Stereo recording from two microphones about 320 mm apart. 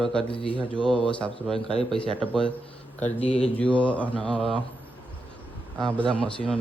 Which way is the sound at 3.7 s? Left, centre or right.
Centre.